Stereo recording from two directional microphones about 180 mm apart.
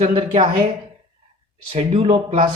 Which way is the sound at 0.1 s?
25° right (ahead or behind).